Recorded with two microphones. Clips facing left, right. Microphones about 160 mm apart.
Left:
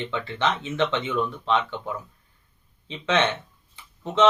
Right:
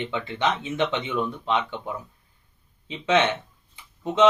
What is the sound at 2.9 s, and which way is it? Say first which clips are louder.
Speech: right 2 dB; 15° right (ahead or behind).